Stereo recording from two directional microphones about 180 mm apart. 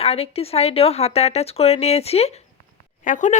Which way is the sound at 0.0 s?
35° left (ahead or behind).